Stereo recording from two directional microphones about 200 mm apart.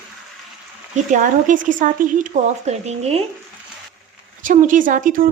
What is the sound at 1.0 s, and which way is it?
Speech, 40° right (ahead or behind).